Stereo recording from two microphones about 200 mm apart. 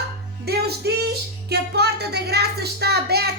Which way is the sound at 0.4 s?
55° right (ahead or behind).